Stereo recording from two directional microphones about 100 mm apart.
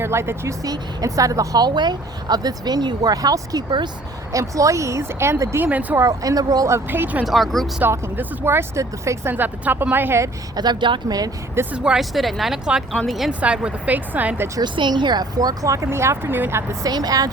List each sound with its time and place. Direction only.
0.0 s speech: 25° right (ahead or behind); by 3.8 s 45° right (ahead or behind)
4.3 s speech: 35° right (ahead or behind)
5.6 s speech: 15° right (ahead or behind)
6.0 s speech: 35° right (ahead or behind)
6.7 s speech: 20° right (ahead or behind)
7.3 s speech: centre (ahead or behind)
7.8 s speech: 20° right (ahead or behind)
9.3 s speech: 15° right (ahead or behind)
10.5 s a woman's voice: 45° right (ahead or behind)
11.7 s speech: 10° right (ahead or behind)
14.6 s speech: 50° right (ahead or behind); by 16.6 s 25° right (ahead or behind)
16.8 s speech: 40° right (ahead or behind)